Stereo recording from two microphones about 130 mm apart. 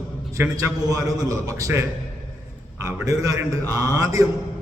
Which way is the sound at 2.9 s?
25° right (ahead or behind).